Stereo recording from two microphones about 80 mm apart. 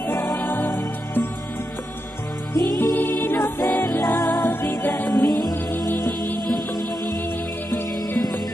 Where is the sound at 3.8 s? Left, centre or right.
Left.